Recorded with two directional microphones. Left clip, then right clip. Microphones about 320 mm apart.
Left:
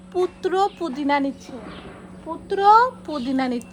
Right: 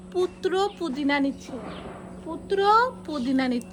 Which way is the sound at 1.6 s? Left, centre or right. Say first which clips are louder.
Right 1 dB; right.